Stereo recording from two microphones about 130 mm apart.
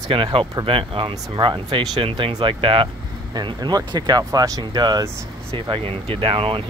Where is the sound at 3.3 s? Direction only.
30° right (ahead or behind).